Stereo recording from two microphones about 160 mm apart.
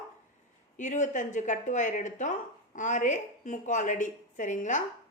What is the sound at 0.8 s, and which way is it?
Speech, 50° left (ahead or behind).